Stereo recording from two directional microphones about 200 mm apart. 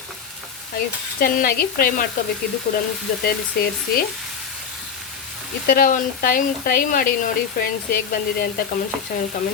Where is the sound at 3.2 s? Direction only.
45° left (ahead or behind).